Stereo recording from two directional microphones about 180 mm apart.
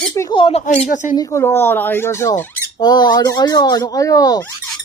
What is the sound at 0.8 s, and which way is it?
Speech, 45° left (ahead or behind).